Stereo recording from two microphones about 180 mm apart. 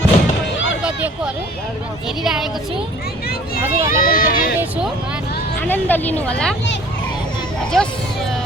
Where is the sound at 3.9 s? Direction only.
50° left (ahead or behind).